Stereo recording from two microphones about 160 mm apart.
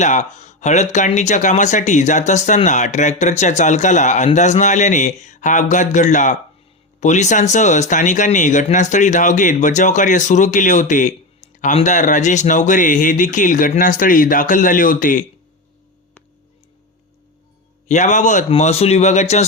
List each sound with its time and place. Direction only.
0.0 s speech: 50° left (ahead or behind)
17.8 s speech: 50° left (ahead or behind)